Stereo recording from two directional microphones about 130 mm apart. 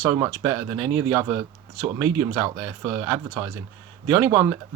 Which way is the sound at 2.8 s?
25° right (ahead or behind).